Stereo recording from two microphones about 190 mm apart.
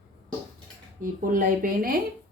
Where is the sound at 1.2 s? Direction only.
45° right (ahead or behind).